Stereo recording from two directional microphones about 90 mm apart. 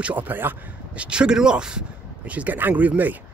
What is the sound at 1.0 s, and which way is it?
Speech, 10° right (ahead or behind).